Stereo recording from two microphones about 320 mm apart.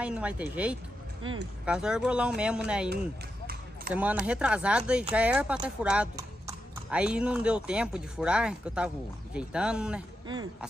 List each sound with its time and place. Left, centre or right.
0.0 s speech: centre
1.2 s speech: right
1.7 s speech: centre
3.9 s speech: centre